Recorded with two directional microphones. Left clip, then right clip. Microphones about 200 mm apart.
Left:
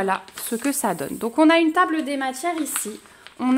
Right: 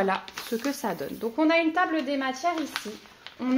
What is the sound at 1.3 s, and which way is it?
Speech, 60° left (ahead or behind).